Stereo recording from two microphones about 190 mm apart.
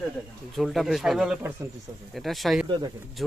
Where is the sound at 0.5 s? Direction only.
Centre (ahead or behind).